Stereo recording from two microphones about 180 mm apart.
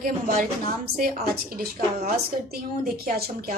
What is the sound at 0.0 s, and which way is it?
Speech, 50° right (ahead or behind).